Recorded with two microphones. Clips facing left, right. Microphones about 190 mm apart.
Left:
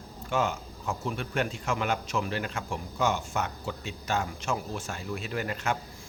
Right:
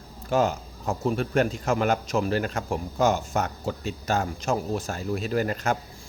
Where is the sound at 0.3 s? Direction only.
40° right (ahead or behind).